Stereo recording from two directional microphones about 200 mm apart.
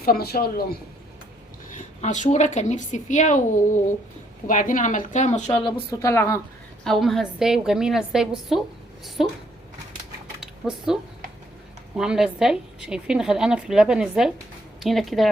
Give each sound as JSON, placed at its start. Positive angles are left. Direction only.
{"t": 0.0, "sound": "speech", "side_deg": 50}
{"t": 2.0, "sound": "speech", "side_deg": 35}
{"t": 5.6, "sound": "speech", "side_deg": 15}
{"t": 6.8, "sound": "a woman's voice", "side_deg": 0}
{"t": 10.4, "sound": "a sound", "side_deg": 0}
{"t": 11.9, "sound": "a woman's voice", "side_deg": -5}